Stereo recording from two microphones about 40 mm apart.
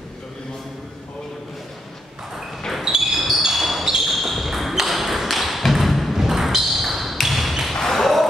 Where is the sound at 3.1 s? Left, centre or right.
Centre.